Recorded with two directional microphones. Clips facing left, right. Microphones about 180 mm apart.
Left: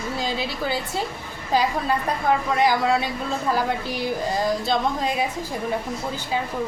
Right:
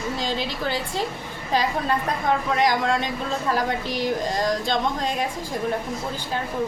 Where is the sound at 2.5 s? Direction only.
5° left (ahead or behind).